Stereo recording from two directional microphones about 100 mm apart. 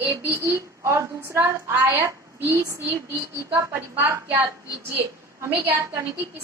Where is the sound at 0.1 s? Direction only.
25° right (ahead or behind).